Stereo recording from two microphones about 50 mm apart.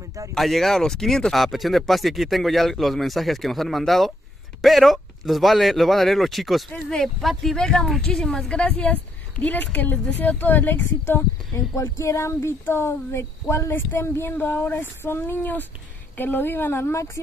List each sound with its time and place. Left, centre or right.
0.3 s speech: centre
7.5 s a woman's voice: centre
8.5 s a woman's voice: left
11.5 s speech: left
12.6 s speech: left